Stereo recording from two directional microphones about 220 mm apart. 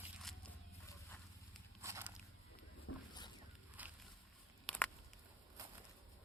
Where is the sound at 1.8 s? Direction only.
15° right (ahead or behind).